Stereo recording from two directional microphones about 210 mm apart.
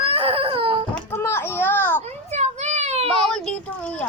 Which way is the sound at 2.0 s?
30° right (ahead or behind).